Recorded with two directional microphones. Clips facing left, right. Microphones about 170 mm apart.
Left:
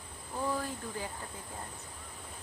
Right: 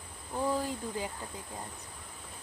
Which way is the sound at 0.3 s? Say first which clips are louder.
Right 3 dB; 15° right (ahead or behind).